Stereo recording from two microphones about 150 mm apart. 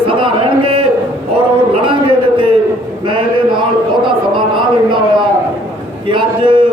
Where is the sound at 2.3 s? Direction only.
35° right (ahead or behind).